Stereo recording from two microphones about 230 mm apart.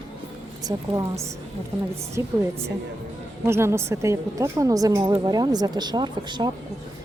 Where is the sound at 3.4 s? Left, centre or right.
Centre.